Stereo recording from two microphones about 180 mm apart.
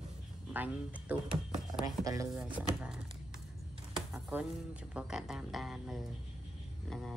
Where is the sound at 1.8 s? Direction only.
20° right (ahead or behind).